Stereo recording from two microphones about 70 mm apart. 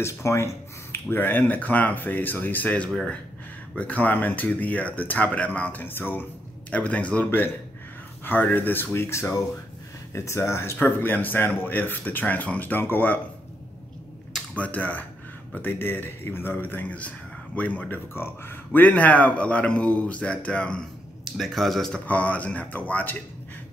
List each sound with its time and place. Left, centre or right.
0.0 s a sound: left
1.1 s speech: left
6.7 s speech: centre
7.2 s speech: left
14.5 s speech: left
21.2 s speech: centre
22.0 s speech: left